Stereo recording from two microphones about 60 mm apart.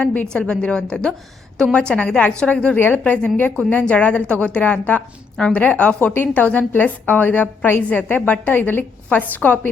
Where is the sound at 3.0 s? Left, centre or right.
Centre.